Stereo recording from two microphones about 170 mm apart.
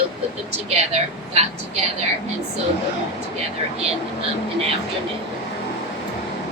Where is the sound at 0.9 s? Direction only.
40° right (ahead or behind).